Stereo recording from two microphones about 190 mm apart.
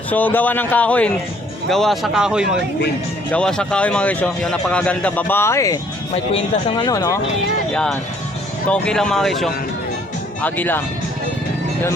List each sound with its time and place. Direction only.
0.1 s speech: 10° left (ahead or behind)
6.3 s speech: 30° left (ahead or behind)
7.7 s speech: 5° left (ahead or behind)